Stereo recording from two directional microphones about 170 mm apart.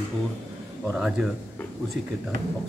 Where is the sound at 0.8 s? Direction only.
5° right (ahead or behind).